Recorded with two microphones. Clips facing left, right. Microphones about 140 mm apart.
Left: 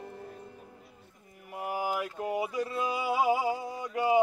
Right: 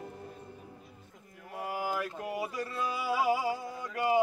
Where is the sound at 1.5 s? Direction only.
15° left (ahead or behind).